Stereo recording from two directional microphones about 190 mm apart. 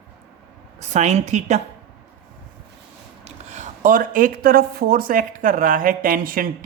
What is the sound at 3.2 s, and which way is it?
Speech, 40° right (ahead or behind).